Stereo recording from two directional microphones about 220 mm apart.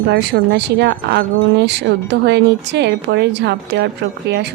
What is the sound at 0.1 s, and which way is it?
Speech, 50° right (ahead or behind).